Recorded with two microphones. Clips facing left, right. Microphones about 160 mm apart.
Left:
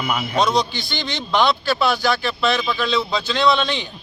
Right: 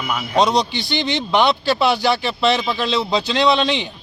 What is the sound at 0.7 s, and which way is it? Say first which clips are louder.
Speech: right 6 dB; 70° right (ahead or behind).